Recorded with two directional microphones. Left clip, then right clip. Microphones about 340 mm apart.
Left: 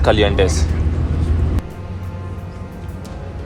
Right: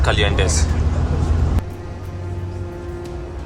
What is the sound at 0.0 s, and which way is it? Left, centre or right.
Speech, centre.